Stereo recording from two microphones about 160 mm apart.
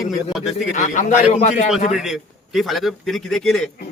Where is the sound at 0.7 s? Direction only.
50° left (ahead or behind).